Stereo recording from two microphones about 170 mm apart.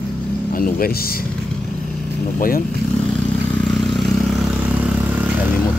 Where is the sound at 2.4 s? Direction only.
60° left (ahead or behind).